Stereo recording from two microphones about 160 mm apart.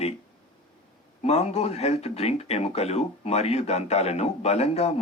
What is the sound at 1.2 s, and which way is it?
Speech, 40° left (ahead or behind).